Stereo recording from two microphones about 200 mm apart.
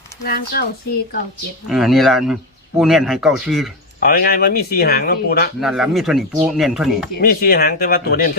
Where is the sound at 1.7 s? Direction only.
Centre (ahead or behind).